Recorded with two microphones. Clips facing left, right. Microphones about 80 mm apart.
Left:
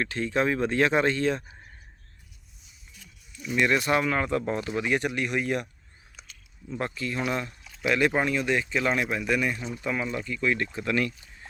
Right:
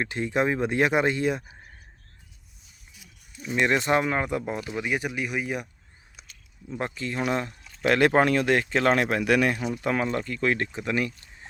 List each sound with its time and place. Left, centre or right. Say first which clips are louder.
0.0 s speech: right 1 dB; centre
3.4 s speech: right 1 dB; right; by 5.6 s centre
6.2 s a sound: left 2 dB; centre
6.7 s speech: even; right
7.6 s a sound: right 4 dB; centre
7.9 s speech: right 4 dB; right
9.8 s speech: right 3 dB; right
10.7 s speech: even; right